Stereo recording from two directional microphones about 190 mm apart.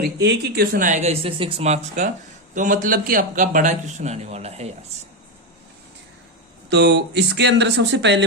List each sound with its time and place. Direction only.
0.0 s a man's voice: 60° right (ahead or behind); by 4.7 s 35° right (ahead or behind)
6.7 s speech: 65° right (ahead or behind)